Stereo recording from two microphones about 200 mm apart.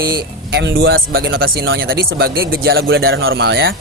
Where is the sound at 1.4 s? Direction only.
55° right (ahead or behind).